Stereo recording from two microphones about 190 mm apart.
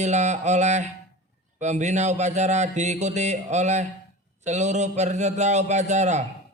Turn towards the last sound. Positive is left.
turn(degrees=-35)  # may be behind; listen again after turning